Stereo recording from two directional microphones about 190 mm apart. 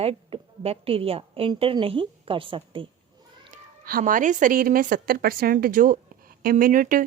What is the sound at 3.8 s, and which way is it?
Speech, 45° right (ahead or behind).